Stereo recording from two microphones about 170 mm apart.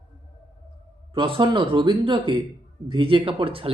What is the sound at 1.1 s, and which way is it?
Speech, 30° right (ahead or behind).